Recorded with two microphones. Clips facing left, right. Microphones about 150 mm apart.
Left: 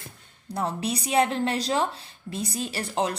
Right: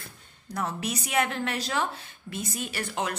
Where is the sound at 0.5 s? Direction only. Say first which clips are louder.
Left 3 dB; 30° left (ahead or behind).